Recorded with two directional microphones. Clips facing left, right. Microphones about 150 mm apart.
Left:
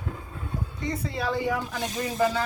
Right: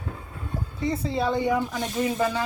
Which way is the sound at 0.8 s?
25° right (ahead or behind).